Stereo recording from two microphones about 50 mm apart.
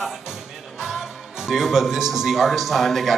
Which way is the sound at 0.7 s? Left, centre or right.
Centre.